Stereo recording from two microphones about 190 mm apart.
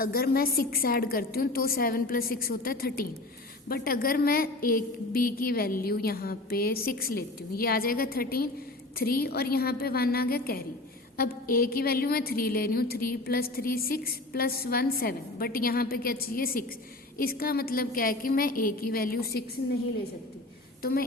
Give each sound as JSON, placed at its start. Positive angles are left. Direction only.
{"t": 0.0, "sound": "a woman's voice", "side_deg": 50}